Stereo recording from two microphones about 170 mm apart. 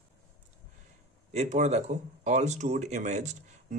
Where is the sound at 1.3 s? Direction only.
40° right (ahead or behind).